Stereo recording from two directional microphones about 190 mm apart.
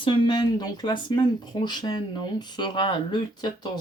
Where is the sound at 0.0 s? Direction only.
25° left (ahead or behind).